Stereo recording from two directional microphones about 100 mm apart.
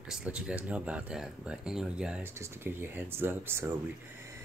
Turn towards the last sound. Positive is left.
turn(degrees=-25)  # may be behind; listen again after turning